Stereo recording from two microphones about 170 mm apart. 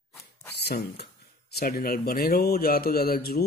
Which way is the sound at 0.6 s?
75° left (ahead or behind).